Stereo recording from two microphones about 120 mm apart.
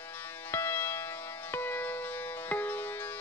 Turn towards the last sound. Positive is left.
turn(degrees=15)  # may be behind; listen again after turning